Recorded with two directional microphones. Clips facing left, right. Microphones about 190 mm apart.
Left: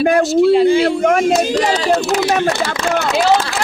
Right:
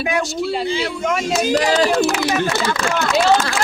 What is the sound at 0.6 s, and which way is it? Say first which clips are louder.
Speech: left 9 dB; 55° left (ahead or behind).